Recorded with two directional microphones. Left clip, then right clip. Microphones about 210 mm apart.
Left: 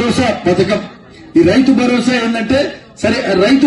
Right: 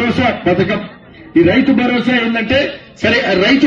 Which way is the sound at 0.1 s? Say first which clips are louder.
Even; 70° left (ahead or behind).